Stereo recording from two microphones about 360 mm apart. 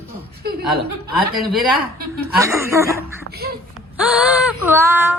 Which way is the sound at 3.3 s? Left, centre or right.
Right.